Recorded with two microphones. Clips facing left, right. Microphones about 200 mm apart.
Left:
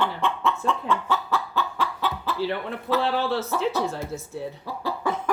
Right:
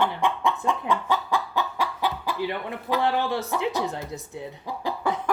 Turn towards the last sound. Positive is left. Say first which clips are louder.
# even
turn(degrees=-15)  # may be behind; listen again after turning